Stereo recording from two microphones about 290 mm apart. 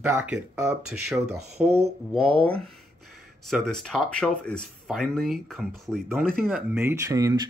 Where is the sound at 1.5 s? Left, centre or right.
Right.